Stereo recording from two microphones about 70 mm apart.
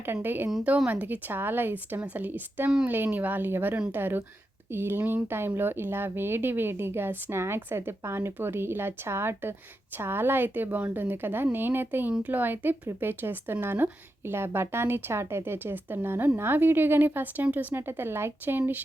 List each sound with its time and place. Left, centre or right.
0.0 s a woman's voice: right